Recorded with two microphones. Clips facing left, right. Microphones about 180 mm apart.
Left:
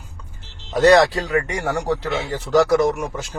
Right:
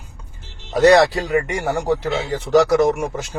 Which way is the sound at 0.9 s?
15° right (ahead or behind).